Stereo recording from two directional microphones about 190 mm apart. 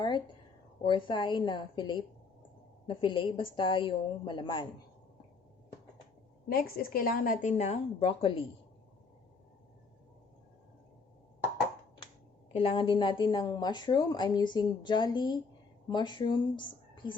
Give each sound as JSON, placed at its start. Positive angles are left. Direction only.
{"t": 0.8, "sound": "a woman's voice", "side_deg": 25}
{"t": 6.5, "sound": "a woman's voice", "side_deg": 50}
{"t": 12.5, "sound": "a woman's voice", "side_deg": 30}